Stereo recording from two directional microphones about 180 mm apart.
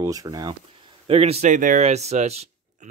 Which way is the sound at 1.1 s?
35° right (ahead or behind).